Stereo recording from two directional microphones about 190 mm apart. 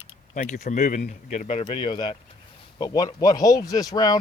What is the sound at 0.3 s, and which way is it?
Speech, 45° left (ahead or behind).